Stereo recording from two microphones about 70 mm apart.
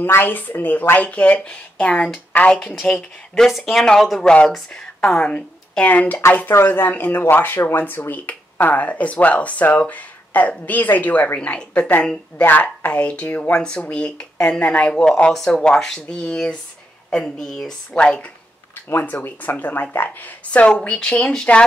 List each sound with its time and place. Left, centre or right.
0.0 s speech: left
18.9 s speech: left; by 21.6 s centre